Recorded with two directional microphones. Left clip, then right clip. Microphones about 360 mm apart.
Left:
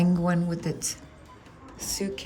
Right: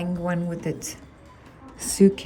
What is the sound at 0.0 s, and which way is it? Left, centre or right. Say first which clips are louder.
Speech: left 1 dB; centre.